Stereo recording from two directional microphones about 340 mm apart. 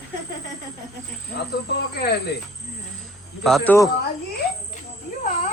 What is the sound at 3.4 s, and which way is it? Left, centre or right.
Speech, centre.